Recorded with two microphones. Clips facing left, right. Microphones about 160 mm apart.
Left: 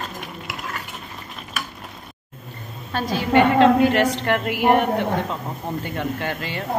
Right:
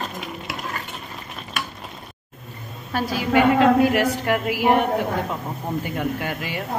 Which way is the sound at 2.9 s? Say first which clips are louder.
Left 1 dB; 10° right (ahead or behind).